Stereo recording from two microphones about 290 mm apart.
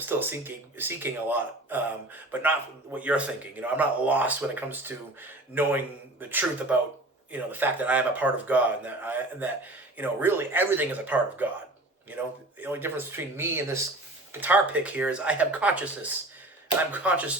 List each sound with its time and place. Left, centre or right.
0.0 s speech: centre